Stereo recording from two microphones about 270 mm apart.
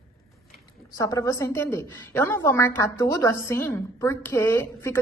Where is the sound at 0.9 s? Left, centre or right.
Centre.